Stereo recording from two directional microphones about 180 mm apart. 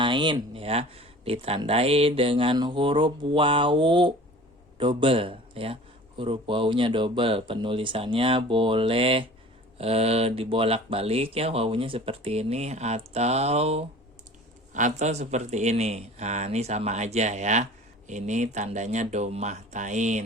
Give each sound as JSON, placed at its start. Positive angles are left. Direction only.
{"t": 0.0, "sound": "speech", "side_deg": -25}